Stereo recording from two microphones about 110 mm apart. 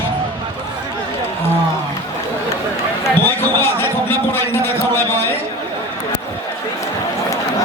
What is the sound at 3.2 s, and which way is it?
Basketball bounce, 20° left (ahead or behind).